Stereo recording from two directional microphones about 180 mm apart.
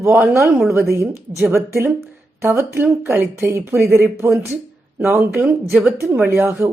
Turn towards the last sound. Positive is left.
turn(degrees=-10)  # may be behind; listen again after turning